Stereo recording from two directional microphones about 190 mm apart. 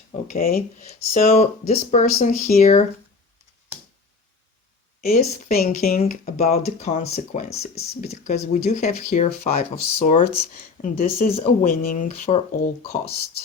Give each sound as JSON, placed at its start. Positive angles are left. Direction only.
{"t": 0.3, "sound": "speech", "side_deg": 50}
{"t": 0.9, "sound": "speech", "side_deg": 35}
{"t": 5.0, "sound": "speech", "side_deg": 50}
{"t": 6.0, "sound": "speech", "side_deg": 35}